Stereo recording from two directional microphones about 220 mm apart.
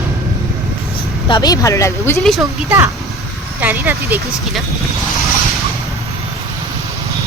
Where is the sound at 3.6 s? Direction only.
10° right (ahead or behind).